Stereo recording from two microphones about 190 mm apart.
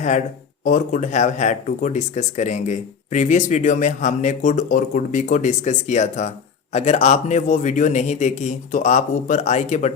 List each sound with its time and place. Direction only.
0.6 s speech: 45° left (ahead or behind)